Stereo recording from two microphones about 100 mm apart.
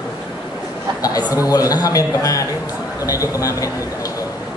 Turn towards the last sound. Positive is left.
turn(degrees=35)  # may be behind; listen again after turning